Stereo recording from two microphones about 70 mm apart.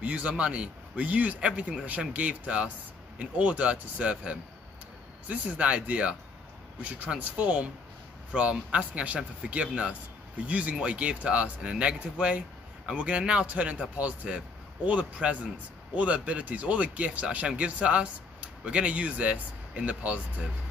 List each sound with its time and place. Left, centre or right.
0.0 s a man's voice: centre